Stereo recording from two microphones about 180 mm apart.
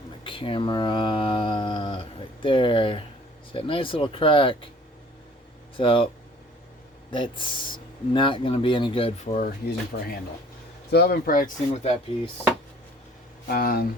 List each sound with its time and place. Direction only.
0.3 s speech: 30° left (ahead or behind)
5.7 s speech: 30° left (ahead or behind)
7.1 s speech: 25° left (ahead or behind)
9.9 s speech: 70° left (ahead or behind)
11.7 s speech: 35° left (ahead or behind)
13.5 s speech: 55° left (ahead or behind)